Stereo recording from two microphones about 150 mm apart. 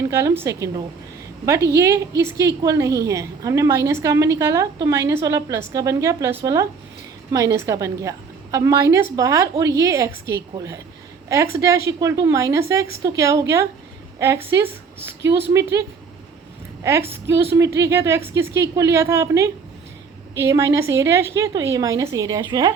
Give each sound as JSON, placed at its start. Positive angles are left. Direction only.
{"t": 0.1, "sound": "a woman's voice", "side_deg": -15}
{"t": 17.7, "sound": "a woman's voice", "side_deg": -20}